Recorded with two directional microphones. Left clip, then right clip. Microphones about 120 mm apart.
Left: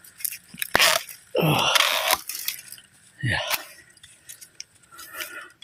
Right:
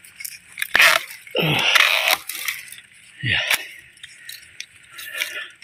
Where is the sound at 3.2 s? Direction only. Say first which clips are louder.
Right 5 dB; 15° left (ahead or behind).